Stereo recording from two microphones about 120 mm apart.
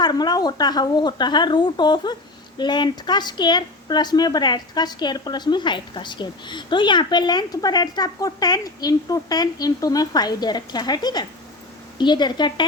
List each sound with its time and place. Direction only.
0.0 s speech: 35° left (ahead or behind)